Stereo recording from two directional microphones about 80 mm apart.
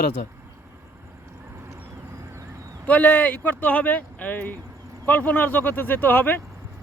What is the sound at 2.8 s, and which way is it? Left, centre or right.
Speech, centre.